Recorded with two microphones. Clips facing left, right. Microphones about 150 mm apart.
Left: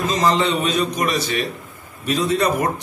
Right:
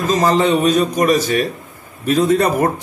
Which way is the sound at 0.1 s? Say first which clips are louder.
Right 6 dB; 45° right (ahead or behind).